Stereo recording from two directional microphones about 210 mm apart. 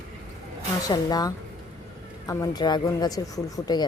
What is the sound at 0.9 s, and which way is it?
A woman's voice, 20° left (ahead or behind).